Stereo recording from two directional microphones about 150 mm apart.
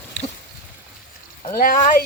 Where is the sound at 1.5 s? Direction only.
70° left (ahead or behind).